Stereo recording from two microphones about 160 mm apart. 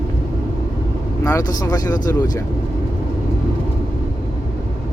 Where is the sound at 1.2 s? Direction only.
20° left (ahead or behind).